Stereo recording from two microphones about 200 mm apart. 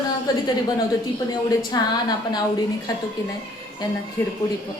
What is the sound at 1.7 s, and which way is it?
Speech, 20° left (ahead or behind).